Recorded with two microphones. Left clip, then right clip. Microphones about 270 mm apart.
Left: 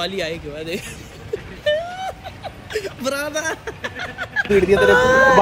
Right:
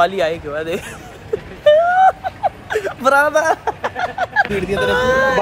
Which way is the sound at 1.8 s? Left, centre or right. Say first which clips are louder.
Right 15 dB; centre.